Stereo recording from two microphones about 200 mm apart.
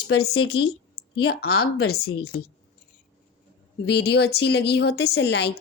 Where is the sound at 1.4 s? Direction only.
90° left.